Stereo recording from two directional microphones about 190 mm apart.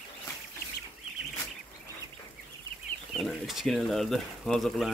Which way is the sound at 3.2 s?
Centre (ahead or behind).